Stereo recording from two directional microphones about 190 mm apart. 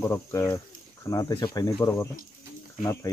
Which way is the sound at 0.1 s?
15° left (ahead or behind).